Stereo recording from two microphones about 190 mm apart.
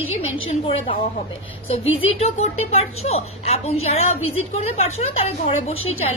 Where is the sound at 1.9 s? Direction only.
90° left.